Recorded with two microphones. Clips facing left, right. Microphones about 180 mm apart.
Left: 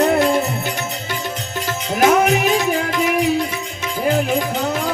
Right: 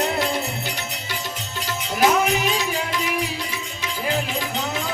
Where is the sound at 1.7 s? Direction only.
50° left (ahead or behind).